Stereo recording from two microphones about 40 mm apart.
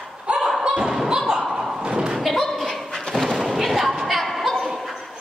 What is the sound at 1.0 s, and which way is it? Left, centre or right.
Thump, centre.